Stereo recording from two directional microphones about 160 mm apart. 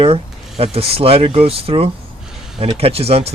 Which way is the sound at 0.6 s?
35° right (ahead or behind).